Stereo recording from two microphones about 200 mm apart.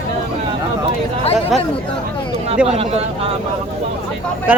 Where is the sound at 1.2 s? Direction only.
30° left (ahead or behind).